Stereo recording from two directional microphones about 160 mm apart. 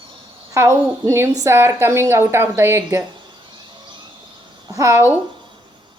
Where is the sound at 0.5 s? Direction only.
15° right (ahead or behind).